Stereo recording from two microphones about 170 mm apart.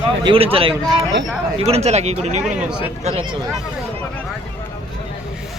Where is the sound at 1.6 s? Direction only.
40° right (ahead or behind).